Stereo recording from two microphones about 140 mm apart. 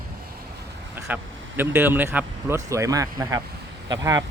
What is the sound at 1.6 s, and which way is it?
Speech, 15° right (ahead or behind).